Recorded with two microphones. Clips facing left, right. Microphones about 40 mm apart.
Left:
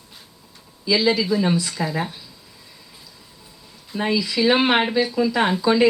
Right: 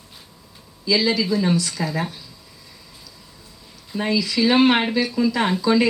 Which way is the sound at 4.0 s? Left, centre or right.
Centre.